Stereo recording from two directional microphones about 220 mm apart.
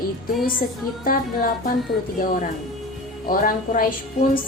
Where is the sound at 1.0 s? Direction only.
40° left (ahead or behind).